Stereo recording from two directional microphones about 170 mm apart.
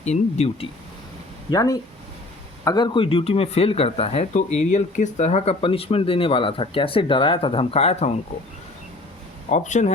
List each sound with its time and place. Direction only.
0.0 s speech: 40° left (ahead or behind)
1.5 s speech: 20° left (ahead or behind); by 8.1 s 40° left (ahead or behind)
9.5 s speech: 45° left (ahead or behind)